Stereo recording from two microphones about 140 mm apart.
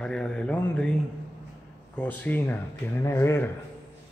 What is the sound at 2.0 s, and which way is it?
Speech, 10° left (ahead or behind).